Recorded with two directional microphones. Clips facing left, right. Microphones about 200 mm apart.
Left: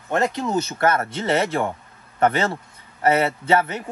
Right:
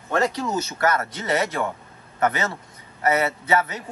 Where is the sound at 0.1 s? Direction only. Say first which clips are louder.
Left 1 dB; 20° left (ahead or behind).